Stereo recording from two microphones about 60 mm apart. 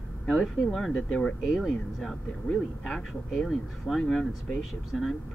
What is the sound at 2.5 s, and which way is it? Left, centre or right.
Speech, centre.